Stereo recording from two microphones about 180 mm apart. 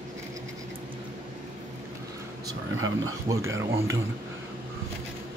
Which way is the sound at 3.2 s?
15° right (ahead or behind).